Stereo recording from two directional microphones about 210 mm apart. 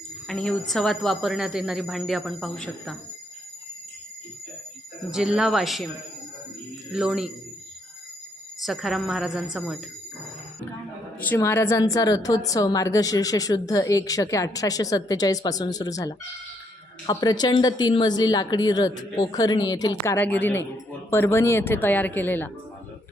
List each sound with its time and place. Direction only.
0.3 s a woman's voice: 5° left (ahead or behind)
5.1 s a woman's voice: 5° right (ahead or behind)
6.9 s a woman's voice: 5° right (ahead or behind)
8.6 s a woman's voice: centre (ahead or behind)
11.2 s a woman's voice: 10° left (ahead or behind)